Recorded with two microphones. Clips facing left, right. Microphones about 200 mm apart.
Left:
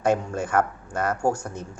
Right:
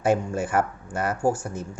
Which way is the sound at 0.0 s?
5° right (ahead or behind).